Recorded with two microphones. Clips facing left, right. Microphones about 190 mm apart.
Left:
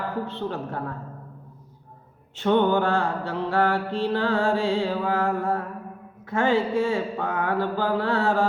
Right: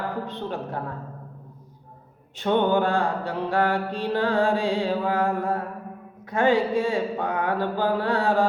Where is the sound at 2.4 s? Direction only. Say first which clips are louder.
Left 1 dB; 15° right (ahead or behind).